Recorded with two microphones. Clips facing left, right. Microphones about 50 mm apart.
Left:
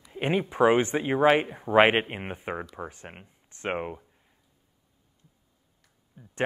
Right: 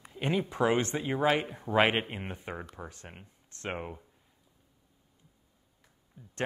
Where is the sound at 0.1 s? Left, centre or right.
Left.